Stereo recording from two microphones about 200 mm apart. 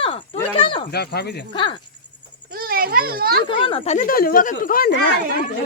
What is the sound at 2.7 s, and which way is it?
Speech, 50° right (ahead or behind).